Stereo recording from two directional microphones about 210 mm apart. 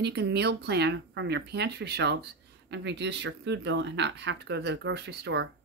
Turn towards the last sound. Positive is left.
turn(degrees=-55)  # may be behind; listen again after turning